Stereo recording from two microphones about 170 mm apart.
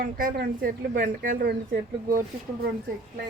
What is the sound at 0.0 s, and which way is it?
Speech, 55° right (ahead or behind).